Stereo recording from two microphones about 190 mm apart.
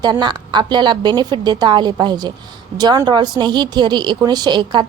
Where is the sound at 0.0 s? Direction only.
20° right (ahead or behind).